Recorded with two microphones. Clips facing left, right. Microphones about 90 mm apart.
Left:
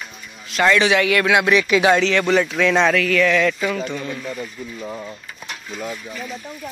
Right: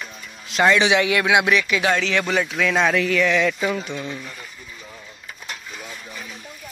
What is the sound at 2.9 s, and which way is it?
Speech, 15° right (ahead or behind).